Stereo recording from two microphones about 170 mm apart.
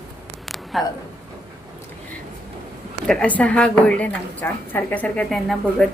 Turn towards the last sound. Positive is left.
turn(degrees=0)  # may be behind; listen again after turning